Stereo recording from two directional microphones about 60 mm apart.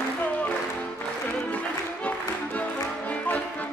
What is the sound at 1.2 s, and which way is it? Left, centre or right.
Music, left.